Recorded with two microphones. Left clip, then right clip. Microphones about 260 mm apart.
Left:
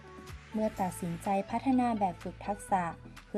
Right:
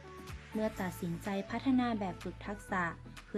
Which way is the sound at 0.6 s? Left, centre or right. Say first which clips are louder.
Left 4 dB; left.